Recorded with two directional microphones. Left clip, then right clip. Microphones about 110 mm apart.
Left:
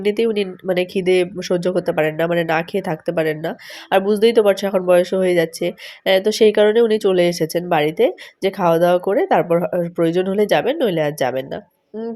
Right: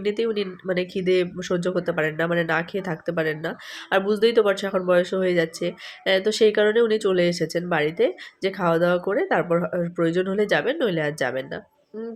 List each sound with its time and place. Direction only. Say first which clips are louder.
0.0 s speech: left 6 dB; 45° left (ahead or behind)